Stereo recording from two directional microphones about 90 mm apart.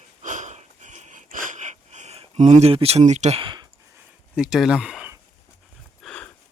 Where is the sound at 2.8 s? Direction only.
90° right.